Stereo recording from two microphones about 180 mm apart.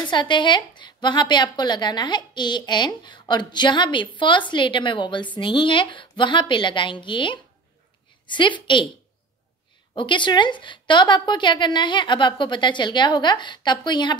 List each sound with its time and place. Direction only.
0.1 s a woman's voice: 25° left (ahead or behind)
9.9 s a woman's voice: 25° left (ahead or behind)